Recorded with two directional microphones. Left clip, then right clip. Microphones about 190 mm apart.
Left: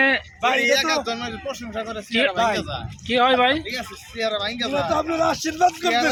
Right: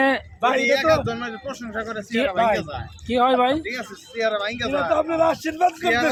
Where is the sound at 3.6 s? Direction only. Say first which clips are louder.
Even; 10° left (ahead or behind).